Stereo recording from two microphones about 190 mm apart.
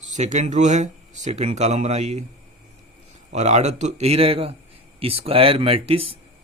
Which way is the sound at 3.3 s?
35° right (ahead or behind).